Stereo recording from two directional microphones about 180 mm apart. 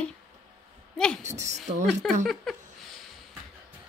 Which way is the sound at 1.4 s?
40° right (ahead or behind).